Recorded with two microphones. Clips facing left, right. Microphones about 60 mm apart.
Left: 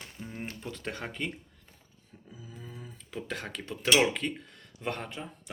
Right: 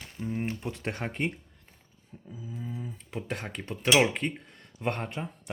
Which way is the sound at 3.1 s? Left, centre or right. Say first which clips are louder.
Right 1 dB; right.